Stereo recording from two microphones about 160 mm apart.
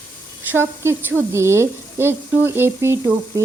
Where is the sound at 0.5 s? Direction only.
15° right (ahead or behind).